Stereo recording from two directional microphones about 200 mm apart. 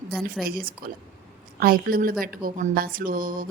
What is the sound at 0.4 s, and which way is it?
Speech, 45° right (ahead or behind).